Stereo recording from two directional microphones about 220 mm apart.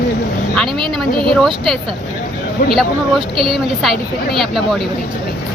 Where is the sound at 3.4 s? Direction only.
Centre (ahead or behind).